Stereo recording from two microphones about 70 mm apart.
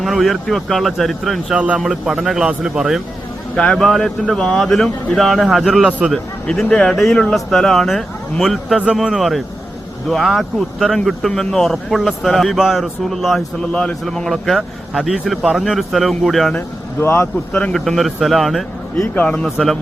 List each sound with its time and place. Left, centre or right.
0.0 s speech: centre
1.5 s speech: centre
1.8 s speech: centre
3.5 s speech: centre
6.5 s speech: centre
16.6 s speech: left
17.5 s speech: centre
17.7 s speech: centre
19.1 s speech: centre
19.5 s speech: centre